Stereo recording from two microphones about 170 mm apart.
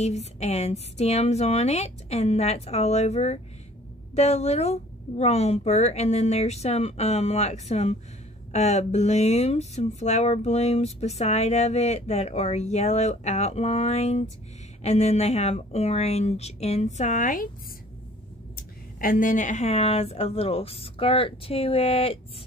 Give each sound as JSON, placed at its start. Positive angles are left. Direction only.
{"t": 0.0, "sound": "speech", "side_deg": 40}
{"t": 18.9, "sound": "speech", "side_deg": 55}